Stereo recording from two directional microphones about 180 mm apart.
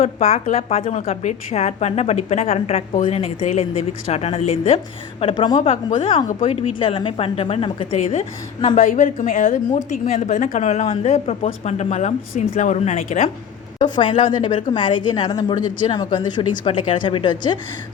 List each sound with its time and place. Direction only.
0.0 s a woman's voice: 35° left (ahead or behind)
5.2 s a woman's voice: 25° left (ahead or behind)
13.7 s a woman's voice: 25° left (ahead or behind)